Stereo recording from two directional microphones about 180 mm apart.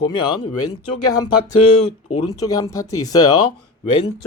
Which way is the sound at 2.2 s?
20° left (ahead or behind).